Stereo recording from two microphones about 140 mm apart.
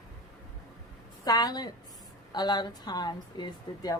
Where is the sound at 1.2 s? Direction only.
25° left (ahead or behind).